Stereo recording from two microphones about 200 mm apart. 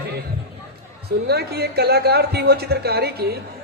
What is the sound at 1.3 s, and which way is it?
A man's voice, 55° right (ahead or behind).